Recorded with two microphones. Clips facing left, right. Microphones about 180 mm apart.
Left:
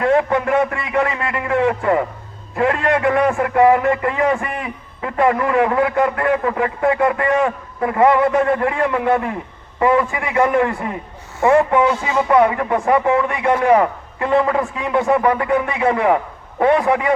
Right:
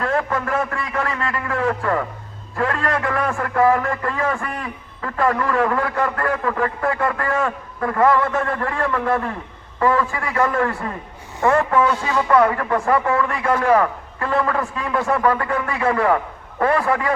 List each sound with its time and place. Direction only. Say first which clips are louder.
0.0 s a man's voice: left 6 dB; 20° left (ahead or behind)